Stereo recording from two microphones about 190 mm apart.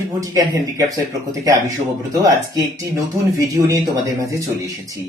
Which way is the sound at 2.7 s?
15° right (ahead or behind).